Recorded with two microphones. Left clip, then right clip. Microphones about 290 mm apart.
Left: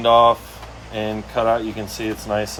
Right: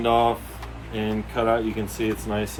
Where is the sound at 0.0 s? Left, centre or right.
Left.